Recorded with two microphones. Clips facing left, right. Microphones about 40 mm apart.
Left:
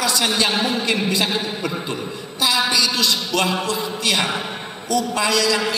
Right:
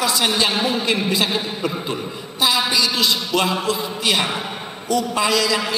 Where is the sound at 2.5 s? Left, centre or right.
Centre.